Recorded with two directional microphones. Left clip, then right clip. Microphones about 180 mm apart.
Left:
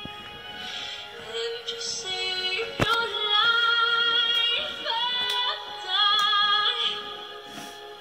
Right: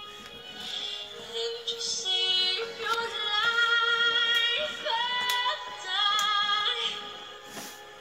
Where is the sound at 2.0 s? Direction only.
30° left (ahead or behind).